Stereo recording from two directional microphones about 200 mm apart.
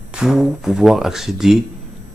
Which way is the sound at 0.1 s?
5° right (ahead or behind).